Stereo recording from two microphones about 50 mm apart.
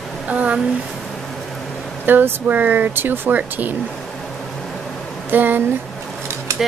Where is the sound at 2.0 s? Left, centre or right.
Right.